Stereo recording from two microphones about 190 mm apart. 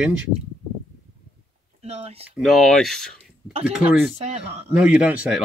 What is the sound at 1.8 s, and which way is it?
Speech, 30° right (ahead or behind).